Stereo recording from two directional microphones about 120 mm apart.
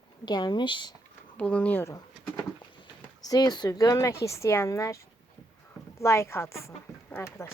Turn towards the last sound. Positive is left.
turn(degrees=20)  # may be behind; listen again after turning